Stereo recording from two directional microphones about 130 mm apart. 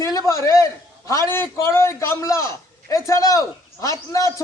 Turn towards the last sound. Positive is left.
turn(degrees=25)  # may be behind; listen again after turning